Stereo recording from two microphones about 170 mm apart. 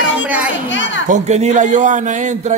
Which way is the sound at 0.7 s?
90° left.